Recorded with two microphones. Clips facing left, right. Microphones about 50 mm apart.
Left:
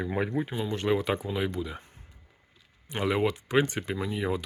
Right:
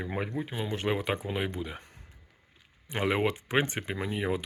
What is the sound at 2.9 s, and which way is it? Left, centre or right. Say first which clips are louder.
Speech: left 1 dB; right.